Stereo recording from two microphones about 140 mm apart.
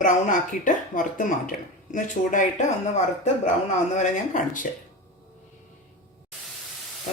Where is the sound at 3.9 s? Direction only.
60° left (ahead or behind).